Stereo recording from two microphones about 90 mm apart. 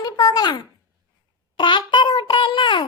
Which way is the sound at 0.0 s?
50° left (ahead or behind).